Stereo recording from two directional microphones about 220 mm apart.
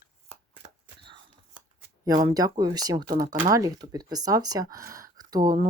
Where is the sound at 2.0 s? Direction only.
15° right (ahead or behind).